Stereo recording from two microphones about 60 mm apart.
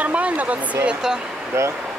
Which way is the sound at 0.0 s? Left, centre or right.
Right.